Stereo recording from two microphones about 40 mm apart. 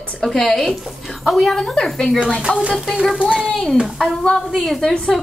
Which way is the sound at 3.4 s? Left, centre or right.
Centre.